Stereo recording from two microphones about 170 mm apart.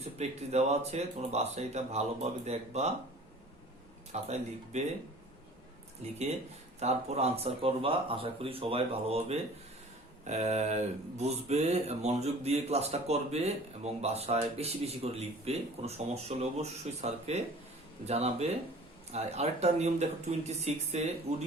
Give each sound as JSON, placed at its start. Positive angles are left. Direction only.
{"t": 0.0, "sound": "speech", "side_deg": -40}
{"t": 4.1, "sound": "speech", "side_deg": -40}
{"t": 6.0, "sound": "speech", "side_deg": -40}